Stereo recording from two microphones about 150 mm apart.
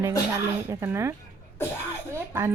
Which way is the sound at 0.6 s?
15° right (ahead or behind).